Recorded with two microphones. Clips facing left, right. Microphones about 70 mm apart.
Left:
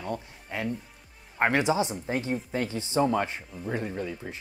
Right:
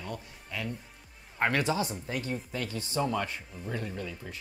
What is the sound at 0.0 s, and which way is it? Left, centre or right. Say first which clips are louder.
Music: left 6 dB; left.